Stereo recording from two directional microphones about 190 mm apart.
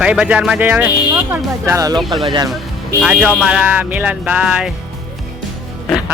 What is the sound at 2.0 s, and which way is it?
Speech, centre (ahead or behind).